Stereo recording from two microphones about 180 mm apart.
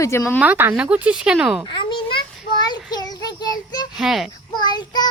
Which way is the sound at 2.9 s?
20° left (ahead or behind).